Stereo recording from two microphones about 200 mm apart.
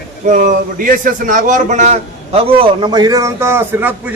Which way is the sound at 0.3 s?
40° right (ahead or behind).